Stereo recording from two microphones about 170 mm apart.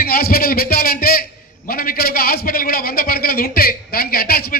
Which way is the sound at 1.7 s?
60° left (ahead or behind).